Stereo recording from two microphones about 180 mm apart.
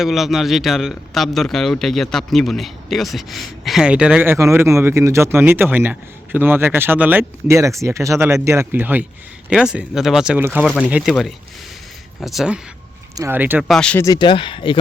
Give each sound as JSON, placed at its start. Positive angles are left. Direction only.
{"t": 0.0, "sound": "speech", "side_deg": 0}
{"t": 13.1, "sound": "speech", "side_deg": -10}
{"t": 14.0, "sound": "speech", "side_deg": 25}